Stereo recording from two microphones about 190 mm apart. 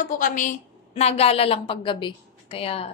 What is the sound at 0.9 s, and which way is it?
A woman's voice, 35° left (ahead or behind).